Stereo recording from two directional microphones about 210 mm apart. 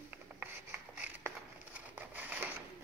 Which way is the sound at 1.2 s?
10° right (ahead or behind).